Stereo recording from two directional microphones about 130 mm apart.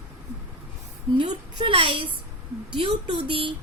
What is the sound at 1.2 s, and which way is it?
A woman's voice, 40° right (ahead or behind).